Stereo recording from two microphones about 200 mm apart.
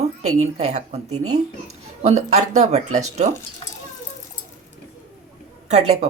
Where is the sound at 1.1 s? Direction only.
90° right.